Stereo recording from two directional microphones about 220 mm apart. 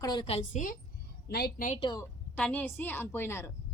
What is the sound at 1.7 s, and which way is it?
Speech, 20° left (ahead or behind).